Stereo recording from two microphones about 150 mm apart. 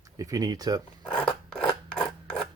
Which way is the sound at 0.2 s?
25° right (ahead or behind).